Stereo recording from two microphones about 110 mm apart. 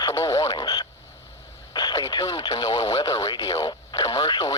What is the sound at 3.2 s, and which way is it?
Speech, 35° left (ahead or behind).